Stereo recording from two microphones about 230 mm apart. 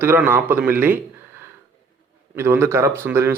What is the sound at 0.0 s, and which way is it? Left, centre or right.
Speech, centre.